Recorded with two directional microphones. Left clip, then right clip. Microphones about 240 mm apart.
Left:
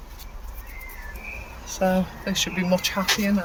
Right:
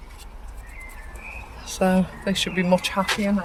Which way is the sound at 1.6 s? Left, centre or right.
Right.